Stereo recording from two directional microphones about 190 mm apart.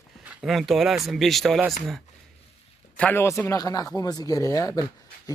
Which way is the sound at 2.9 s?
10° left (ahead or behind).